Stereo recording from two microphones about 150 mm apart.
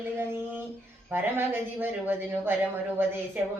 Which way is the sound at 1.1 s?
15° right (ahead or behind).